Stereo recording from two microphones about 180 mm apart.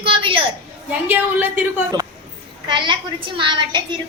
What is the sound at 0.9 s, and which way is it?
Speech, 10° right (ahead or behind).